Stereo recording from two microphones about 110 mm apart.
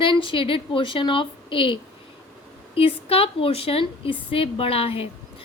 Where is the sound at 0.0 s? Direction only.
50° left (ahead or behind).